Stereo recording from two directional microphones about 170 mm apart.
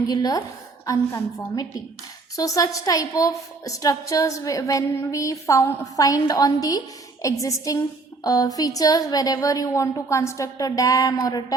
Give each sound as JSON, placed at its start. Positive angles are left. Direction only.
{"t": 0.1, "sound": "a woman's voice", "side_deg": 20}